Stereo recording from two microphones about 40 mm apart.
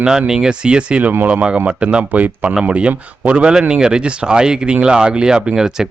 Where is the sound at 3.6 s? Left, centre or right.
Right.